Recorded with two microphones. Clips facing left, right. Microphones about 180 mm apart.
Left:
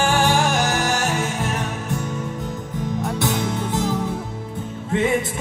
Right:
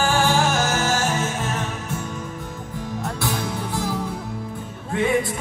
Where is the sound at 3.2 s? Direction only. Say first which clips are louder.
Left 3 dB; 20° left (ahead or behind).